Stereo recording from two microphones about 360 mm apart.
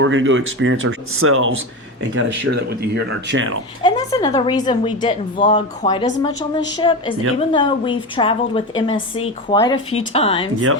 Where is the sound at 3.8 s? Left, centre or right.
Centre.